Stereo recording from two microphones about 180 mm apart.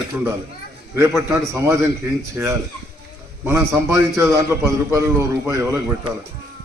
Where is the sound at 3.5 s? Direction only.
15° right (ahead or behind).